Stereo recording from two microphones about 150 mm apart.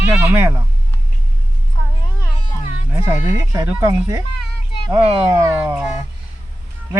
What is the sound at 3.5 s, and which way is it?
Speech, 20° right (ahead or behind).